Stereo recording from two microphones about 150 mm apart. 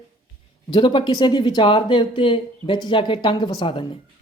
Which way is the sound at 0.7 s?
30° left (ahead or behind).